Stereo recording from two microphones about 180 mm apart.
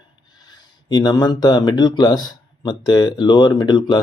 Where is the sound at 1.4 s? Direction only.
25° left (ahead or behind).